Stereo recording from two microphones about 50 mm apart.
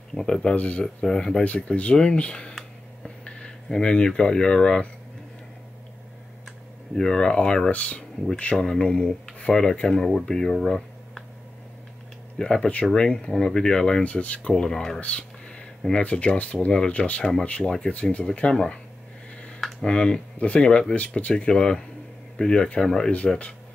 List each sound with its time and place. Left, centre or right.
0.1 s speech: centre
0.6 s speech: left
1.0 s speech: centre
1.4 s speech: left
3.3 s a sound: left
3.6 s speech: centre
7.0 s speech: centre
12.4 s speech: centre
14.0 s speech: left
14.5 s speech: centre
15.0 s a sound: left
15.9 s speech: left